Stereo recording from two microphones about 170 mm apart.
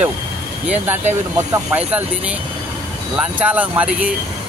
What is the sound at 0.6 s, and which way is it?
Speech, 10° right (ahead or behind).